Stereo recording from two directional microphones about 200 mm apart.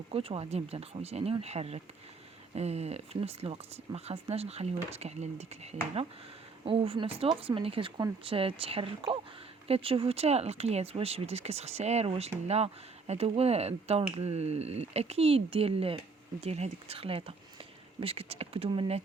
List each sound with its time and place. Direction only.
0.1 s speech: 30° right (ahead or behind)
6.7 s speech: 25° right (ahead or behind)